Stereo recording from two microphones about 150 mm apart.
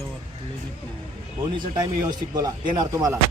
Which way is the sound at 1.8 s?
25° right (ahead or behind).